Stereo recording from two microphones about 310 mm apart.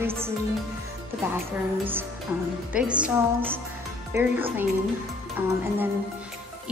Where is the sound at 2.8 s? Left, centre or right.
Centre.